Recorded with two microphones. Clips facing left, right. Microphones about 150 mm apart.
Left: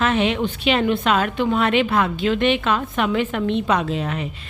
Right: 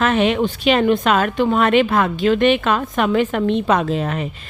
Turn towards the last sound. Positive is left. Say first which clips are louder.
# right 3 dB
turn(degrees=-45)  # may be behind; listen again after turning